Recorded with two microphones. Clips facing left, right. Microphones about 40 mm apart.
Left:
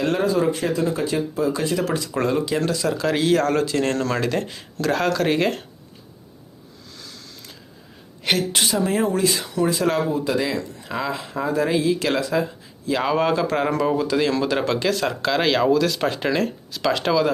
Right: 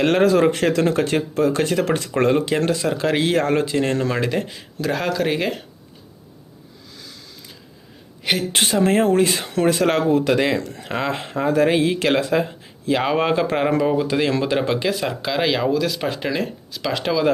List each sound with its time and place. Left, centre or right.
0.0 s speech: right; by 5.6 s centre
6.9 s a sound: centre
8.5 s speech: right
10.6 s speech: right
10.8 s speech: right; by 15.3 s centre
15.3 s speech: centre